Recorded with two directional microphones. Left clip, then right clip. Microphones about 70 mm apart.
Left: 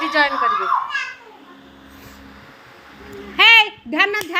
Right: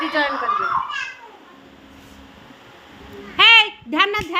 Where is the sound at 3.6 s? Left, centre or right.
Right.